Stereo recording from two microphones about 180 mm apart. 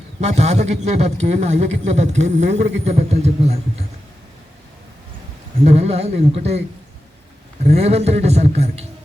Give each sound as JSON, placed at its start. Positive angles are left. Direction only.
{"t": 0.2, "sound": "a man's voice", "side_deg": -40}
{"t": 5.6, "sound": "a man's voice", "side_deg": -35}
{"t": 7.6, "sound": "a man's voice", "side_deg": -35}